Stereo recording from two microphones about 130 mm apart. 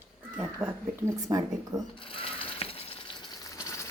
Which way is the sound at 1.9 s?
40° left (ahead or behind).